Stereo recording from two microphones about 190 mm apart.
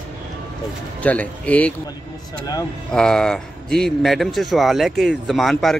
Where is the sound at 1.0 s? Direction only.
10° left (ahead or behind).